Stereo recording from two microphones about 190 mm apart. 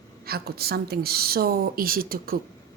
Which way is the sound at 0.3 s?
55° right (ahead or behind).